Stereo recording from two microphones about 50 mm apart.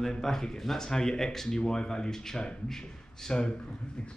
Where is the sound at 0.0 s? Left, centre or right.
Centre.